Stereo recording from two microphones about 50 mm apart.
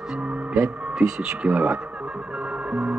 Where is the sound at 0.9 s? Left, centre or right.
Centre.